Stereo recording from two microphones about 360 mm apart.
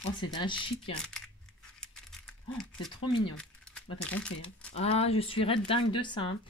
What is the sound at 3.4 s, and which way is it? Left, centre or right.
Speech, centre.